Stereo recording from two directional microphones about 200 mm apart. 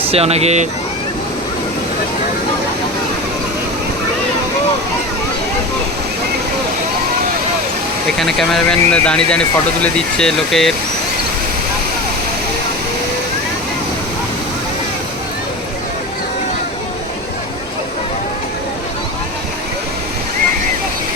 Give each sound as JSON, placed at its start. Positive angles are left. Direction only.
{"t": 0.1, "sound": "speech", "side_deg": -30}
{"t": 8.2, "sound": "speech", "side_deg": 0}